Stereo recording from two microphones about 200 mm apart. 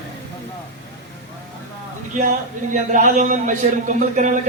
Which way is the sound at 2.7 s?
40° right (ahead or behind).